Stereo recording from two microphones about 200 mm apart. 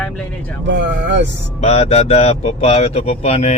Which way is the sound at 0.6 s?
60° right (ahead or behind).